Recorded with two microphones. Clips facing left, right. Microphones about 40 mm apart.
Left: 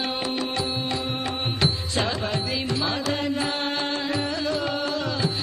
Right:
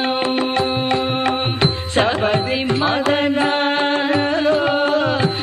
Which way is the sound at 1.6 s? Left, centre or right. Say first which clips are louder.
Right 7 dB; right.